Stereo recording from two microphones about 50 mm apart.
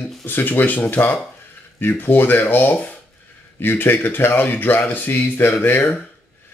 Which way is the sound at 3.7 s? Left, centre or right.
Left.